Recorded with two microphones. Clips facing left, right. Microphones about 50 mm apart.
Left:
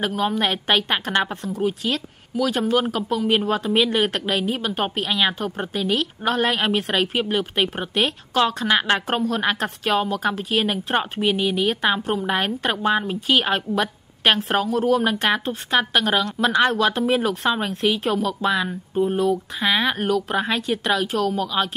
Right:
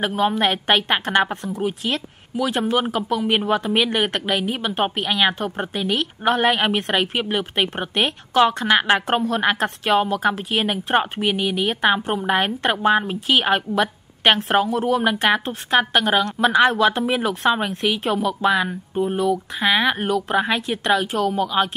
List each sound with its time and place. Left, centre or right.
0.0 s a woman's voice: centre
5.8 s a woman's voice: right
7.1 s a woman's voice: centre
7.8 s a woman's voice: right
9.0 s a woman's voice: centre
18.1 s a woman's voice: centre
18.9 s a woman's voice: centre